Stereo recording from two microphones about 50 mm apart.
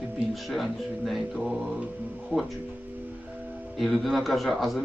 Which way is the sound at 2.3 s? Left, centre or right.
Right.